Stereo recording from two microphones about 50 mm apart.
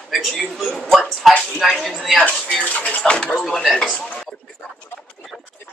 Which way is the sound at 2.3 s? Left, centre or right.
Centre.